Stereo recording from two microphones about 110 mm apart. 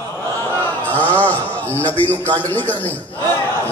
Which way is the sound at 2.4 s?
15° left (ahead or behind).